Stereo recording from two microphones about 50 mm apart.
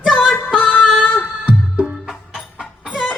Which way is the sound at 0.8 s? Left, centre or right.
Left.